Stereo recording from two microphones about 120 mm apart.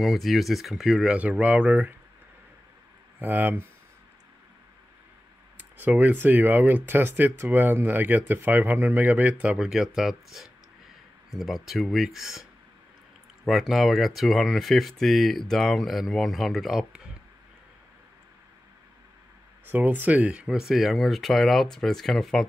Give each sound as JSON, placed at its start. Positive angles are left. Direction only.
{"t": 0.0, "sound": "speech", "side_deg": 0}
{"t": 3.2, "sound": "speech", "side_deg": -15}
{"t": 5.6, "sound": "speech", "side_deg": -15}
{"t": 13.5, "sound": "speech", "side_deg": 0}
{"t": 19.6, "sound": "speech", "side_deg": -15}